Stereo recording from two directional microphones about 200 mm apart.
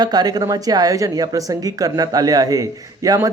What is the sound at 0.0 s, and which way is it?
A woman's voice, 20° right (ahead or behind).